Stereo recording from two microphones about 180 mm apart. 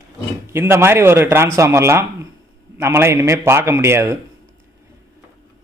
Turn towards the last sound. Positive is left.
turn(degrees=-15)  # may be behind; listen again after turning